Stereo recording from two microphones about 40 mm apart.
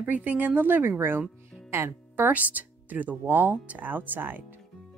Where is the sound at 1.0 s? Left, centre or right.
Right.